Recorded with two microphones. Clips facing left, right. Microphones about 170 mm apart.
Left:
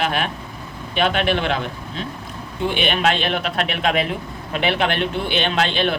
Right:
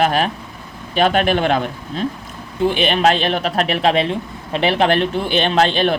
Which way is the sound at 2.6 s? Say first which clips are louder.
Right 4 dB; 40° right (ahead or behind).